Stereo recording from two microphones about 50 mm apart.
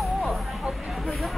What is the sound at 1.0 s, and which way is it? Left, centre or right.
Hubbub, centre.